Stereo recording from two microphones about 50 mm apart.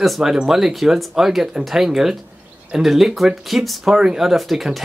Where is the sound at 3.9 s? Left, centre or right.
Centre.